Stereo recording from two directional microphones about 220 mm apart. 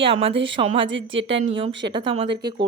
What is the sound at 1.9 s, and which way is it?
Speech, 25° right (ahead or behind).